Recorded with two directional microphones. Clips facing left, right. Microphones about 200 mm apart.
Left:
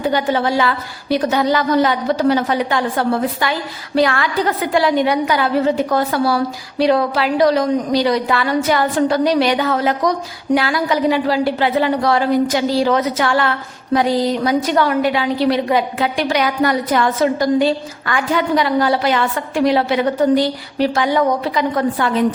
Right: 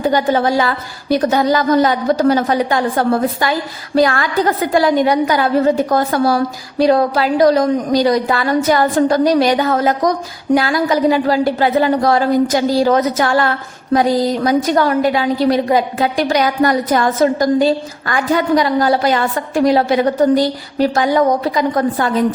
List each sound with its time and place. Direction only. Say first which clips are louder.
0.0 s a woman's voice: right 3 dB; 45° right (ahead or behind)